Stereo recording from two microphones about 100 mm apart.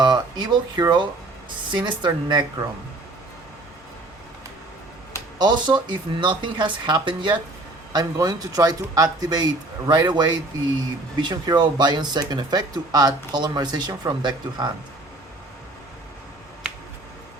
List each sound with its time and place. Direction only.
0.0 s speech: 50° right (ahead or behind)
2.0 s speech: 40° right (ahead or behind)
5.4 s speech: 50° right (ahead or behind)
8.1 s speech: 35° right (ahead or behind)